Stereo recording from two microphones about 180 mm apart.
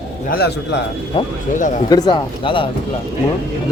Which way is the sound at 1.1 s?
30° left (ahead or behind).